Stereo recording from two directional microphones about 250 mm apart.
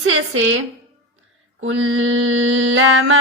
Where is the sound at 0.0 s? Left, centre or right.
Right.